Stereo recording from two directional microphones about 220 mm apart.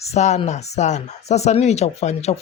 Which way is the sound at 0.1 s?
30° left (ahead or behind).